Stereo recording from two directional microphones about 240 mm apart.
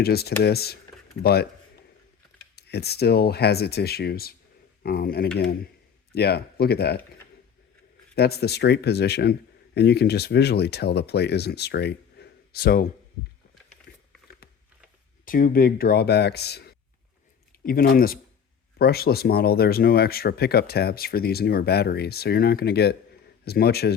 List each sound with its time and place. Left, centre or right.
0.0 s speech: left
2.6 s speech: left
8.1 s speech: left
15.2 s speech: left